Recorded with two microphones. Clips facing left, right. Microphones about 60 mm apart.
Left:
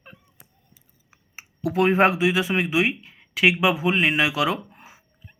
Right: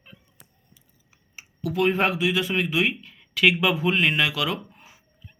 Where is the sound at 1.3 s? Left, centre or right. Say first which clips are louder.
Left 3 dB; left.